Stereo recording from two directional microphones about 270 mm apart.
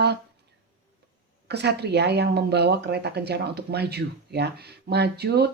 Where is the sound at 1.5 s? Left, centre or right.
Right.